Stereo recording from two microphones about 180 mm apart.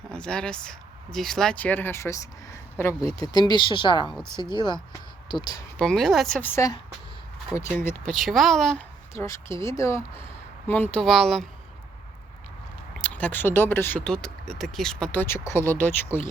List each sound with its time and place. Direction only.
0.1 s speech: 5° left (ahead or behind); by 5.6 s 25° left (ahead or behind)
5.8 s speech: 5° left (ahead or behind)
7.5 s speech: centre (ahead or behind)
7.9 s speech: 10° left (ahead or behind)
8.1 s speech: centre (ahead or behind)
9.1 s speech: 15° left (ahead or behind)
10.9 s speech: centre (ahead or behind)
13.0 s speech: 10° left (ahead or behind)